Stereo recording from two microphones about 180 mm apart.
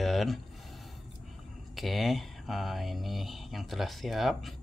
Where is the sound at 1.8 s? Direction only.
Centre (ahead or behind).